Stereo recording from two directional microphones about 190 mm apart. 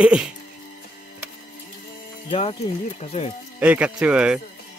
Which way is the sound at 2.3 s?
30° left (ahead or behind).